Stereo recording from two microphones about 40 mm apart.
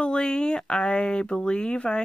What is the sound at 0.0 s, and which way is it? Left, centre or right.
Speech, centre.